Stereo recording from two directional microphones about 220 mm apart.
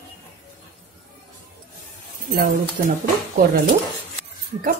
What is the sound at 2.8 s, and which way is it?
Speech, 40° right (ahead or behind).